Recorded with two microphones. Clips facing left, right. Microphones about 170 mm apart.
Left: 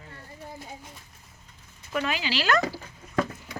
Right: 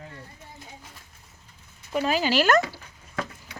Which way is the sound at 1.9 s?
35° right (ahead or behind).